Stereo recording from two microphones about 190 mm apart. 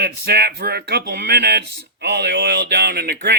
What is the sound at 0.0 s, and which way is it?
Speech, 60° right (ahead or behind).